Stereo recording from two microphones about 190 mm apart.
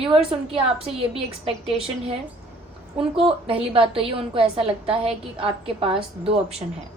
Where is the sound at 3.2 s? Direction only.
30° right (ahead or behind).